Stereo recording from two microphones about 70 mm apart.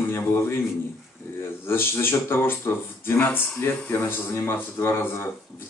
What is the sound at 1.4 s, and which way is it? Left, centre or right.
Speech, left.